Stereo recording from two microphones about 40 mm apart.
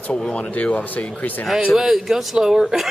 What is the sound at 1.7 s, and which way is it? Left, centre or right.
Speech, centre.